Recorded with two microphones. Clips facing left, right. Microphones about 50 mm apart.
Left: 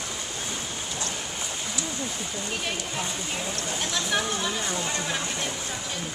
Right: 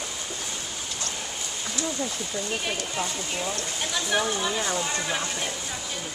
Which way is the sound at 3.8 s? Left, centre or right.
Centre.